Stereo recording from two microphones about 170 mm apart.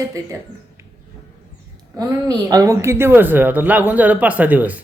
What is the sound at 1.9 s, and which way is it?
A woman's voice, 20° right (ahead or behind).